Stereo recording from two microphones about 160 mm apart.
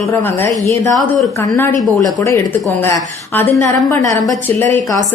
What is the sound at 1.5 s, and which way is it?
A woman's voice, 20° left (ahead or behind).